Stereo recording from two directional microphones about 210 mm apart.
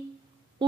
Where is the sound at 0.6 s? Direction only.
20° right (ahead or behind).